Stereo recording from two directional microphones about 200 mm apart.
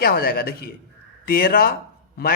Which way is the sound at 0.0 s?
50° left (ahead or behind).